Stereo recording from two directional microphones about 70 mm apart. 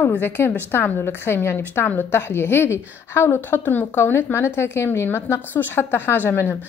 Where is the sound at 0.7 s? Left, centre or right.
Left.